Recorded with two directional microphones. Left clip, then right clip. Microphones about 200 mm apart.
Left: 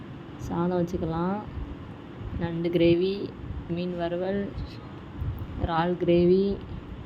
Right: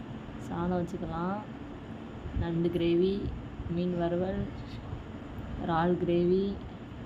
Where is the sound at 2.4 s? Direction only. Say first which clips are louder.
Left 6 dB; 15° left (ahead or behind).